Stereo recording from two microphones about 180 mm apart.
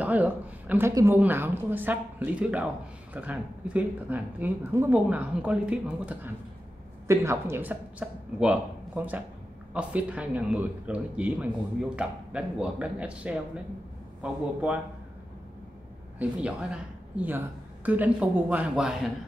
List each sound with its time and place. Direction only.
0.0 s a woman's voice: 10° right (ahead or behind)
16.2 s a woman's voice: 5° right (ahead or behind)